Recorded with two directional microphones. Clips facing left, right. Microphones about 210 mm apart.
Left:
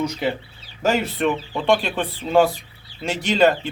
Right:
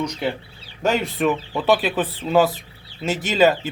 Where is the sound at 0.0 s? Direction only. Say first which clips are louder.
Left 1 dB; 5° left (ahead or behind).